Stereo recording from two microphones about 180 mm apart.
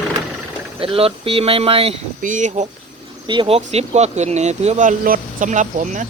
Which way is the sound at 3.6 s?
40° right (ahead or behind).